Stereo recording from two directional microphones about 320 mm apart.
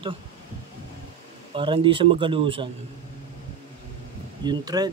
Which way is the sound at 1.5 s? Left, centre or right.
Centre.